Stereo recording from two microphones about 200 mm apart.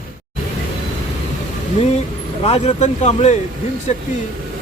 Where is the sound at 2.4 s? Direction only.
30° left (ahead or behind).